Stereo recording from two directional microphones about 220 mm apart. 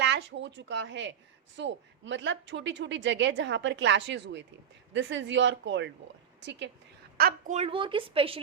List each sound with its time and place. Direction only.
0.0 s a woman's voice: 55° right (ahead or behind)
7.2 s a woman's voice: 40° right (ahead or behind)